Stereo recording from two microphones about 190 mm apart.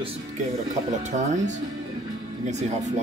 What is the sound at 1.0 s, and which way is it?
Speech, 40° right (ahead or behind).